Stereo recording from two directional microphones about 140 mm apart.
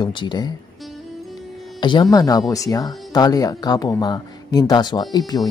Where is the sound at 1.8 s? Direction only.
30° left (ahead or behind).